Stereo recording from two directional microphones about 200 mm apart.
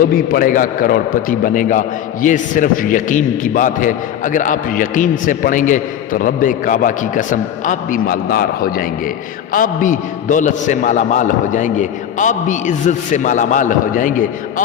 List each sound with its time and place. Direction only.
0.0 s a man's voice: 45° left (ahead or behind)